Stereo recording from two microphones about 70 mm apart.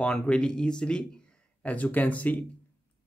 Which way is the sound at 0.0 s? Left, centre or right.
Centre.